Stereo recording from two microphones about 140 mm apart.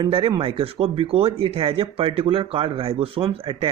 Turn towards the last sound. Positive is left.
turn(degrees=-45)  # may be behind; listen again after turning